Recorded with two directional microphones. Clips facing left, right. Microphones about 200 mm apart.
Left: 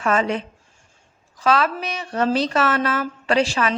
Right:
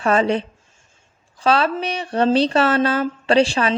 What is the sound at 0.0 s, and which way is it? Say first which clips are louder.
Speech: right 3 dB; 30° right (ahead or behind).